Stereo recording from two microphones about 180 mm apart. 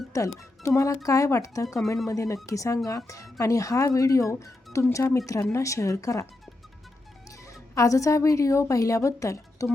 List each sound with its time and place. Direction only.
0.1 s speech: 15° left (ahead or behind)
7.8 s speech: 15° left (ahead or behind)